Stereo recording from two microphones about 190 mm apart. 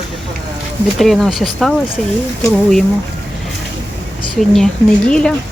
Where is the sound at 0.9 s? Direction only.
Centre (ahead or behind).